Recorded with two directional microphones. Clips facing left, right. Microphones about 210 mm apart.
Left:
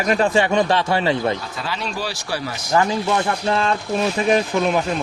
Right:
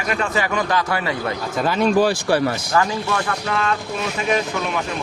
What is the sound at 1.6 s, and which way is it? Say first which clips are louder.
Speech: right 12 dB; 50° right (ahead or behind).